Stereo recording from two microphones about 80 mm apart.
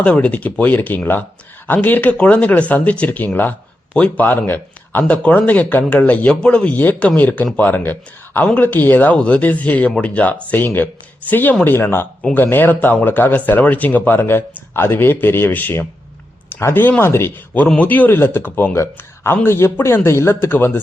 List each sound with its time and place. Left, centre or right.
0.0 s speech: centre